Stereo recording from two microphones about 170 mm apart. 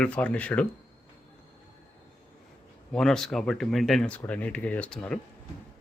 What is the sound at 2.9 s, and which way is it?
Speech, 5° left (ahead or behind).